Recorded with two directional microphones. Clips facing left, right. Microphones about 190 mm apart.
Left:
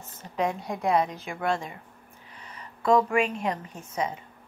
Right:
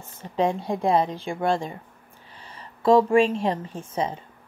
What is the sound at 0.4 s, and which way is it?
A woman's voice, 30° right (ahead or behind).